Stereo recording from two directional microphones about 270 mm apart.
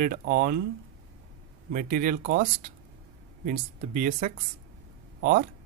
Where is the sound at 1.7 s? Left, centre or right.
Right.